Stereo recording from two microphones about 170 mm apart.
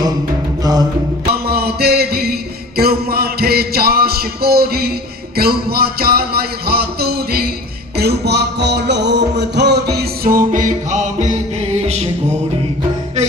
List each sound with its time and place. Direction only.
0.6 s music: 20° right (ahead or behind)
1.3 s music: 65° right (ahead or behind); by 12.0 s 40° right (ahead or behind)